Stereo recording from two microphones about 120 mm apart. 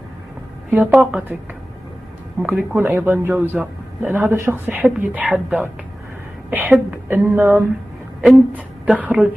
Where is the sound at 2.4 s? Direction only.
15° right (ahead or behind).